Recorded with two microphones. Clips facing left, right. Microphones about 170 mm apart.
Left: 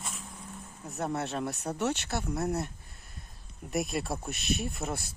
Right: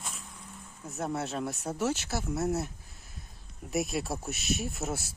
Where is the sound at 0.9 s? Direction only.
Centre (ahead or behind).